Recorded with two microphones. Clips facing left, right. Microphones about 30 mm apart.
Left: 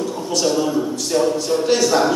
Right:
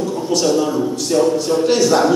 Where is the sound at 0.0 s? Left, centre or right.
Centre.